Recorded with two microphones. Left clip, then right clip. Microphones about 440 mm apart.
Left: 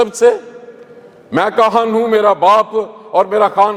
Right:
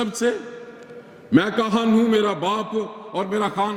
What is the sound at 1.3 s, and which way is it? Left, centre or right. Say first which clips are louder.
A man's voice: left 8 dB; left.